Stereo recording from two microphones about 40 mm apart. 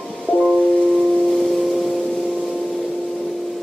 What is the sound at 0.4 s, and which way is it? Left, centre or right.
Music, left.